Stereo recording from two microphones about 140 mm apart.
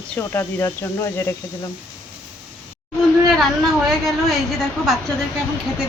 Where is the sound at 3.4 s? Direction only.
Centre (ahead or behind).